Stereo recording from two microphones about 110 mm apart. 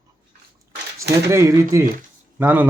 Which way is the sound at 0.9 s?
25° right (ahead or behind).